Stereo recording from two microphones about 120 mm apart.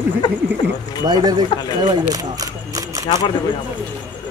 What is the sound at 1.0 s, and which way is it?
Speech, 35° right (ahead or behind).